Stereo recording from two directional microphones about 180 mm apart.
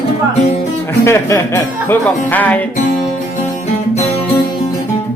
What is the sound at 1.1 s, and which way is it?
Music, 15° left (ahead or behind).